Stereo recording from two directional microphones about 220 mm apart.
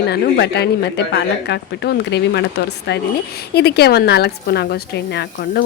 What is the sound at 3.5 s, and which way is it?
A woman's voice, 45° left (ahead or behind).